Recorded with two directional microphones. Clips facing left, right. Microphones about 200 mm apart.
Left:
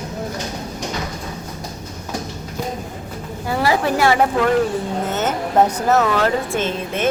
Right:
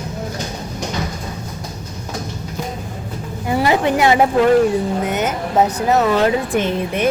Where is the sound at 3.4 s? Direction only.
20° right (ahead or behind).